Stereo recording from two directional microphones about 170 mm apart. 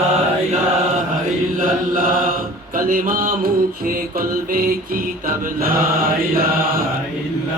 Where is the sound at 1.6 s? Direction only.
55° right (ahead or behind).